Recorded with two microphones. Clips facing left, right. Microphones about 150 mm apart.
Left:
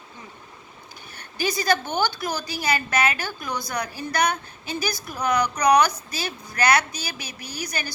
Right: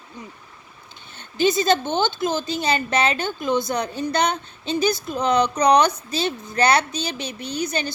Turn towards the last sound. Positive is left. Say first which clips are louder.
# right 7 dB
turn(degrees=-25)  # may be behind; listen again after turning